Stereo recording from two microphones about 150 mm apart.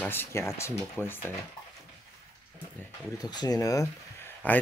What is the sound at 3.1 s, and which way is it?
Speech, 25° left (ahead or behind).